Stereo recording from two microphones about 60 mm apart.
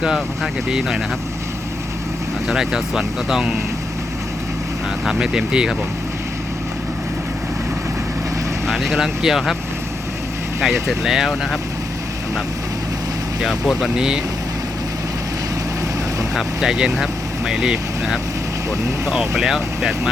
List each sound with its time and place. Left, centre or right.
0.7 s speech: centre
2.5 s speech: centre
5.0 s speech: centre
8.6 s speech: centre
10.6 s speech: centre
13.4 s speech: centre
16.3 s speech: centre